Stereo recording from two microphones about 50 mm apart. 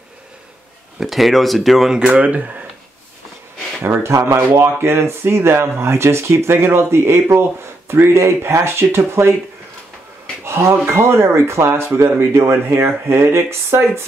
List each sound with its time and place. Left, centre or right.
0.9 s speech: centre
2.0 s speech: right
4.0 s speech: right
4.4 s speech: right
10.4 s a sound: right
10.9 s speech: right